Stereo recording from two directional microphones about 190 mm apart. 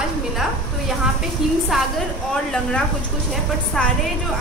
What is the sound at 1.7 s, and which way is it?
Speech, centre (ahead or behind).